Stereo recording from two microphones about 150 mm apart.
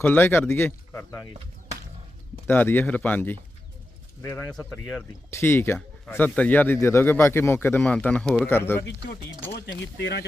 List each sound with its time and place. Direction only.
0.0 s speech: 10° left (ahead or behind)
2.5 s speech: 15° left (ahead or behind)
4.5 s speech: 5° left (ahead or behind)
5.3 s speech: 15° left (ahead or behind)